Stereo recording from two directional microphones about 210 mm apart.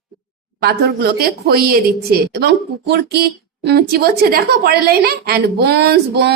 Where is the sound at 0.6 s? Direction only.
45° right (ahead or behind).